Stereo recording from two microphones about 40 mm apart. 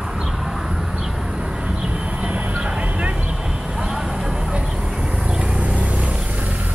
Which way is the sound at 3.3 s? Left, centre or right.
Centre.